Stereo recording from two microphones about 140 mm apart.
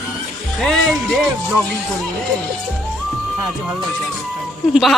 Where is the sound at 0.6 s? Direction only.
Centre (ahead or behind).